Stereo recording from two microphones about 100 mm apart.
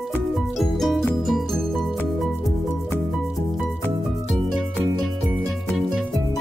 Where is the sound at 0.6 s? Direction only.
Centre (ahead or behind).